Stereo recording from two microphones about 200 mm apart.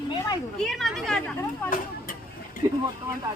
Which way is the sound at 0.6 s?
Centre (ahead or behind).